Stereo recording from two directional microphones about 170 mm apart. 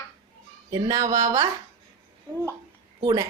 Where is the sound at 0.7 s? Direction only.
20° right (ahead or behind).